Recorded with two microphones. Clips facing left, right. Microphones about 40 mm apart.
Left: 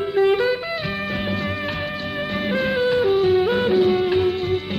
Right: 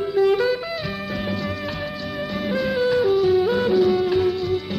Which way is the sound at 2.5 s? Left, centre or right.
Left.